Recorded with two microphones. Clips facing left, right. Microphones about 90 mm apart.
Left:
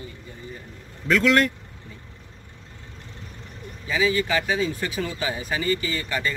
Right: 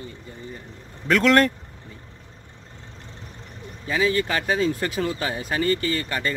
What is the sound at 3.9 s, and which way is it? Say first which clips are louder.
Speech: even; 45° right (ahead or behind).